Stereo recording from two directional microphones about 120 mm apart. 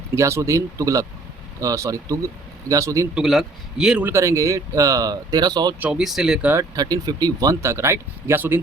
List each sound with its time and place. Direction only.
0.1 s speech: 25° right (ahead or behind)
3.2 s a man's voice: 5° right (ahead or behind)
4.0 s speech: 25° right (ahead or behind)
5.8 s a man's voice: 5° right (ahead or behind)
6.7 s speech: 30° right (ahead or behind)